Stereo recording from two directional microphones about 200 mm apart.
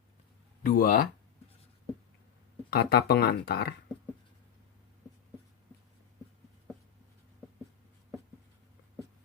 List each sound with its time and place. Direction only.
0.6 s speech: 45° left (ahead or behind)
2.6 s speech: 50° left (ahead or behind)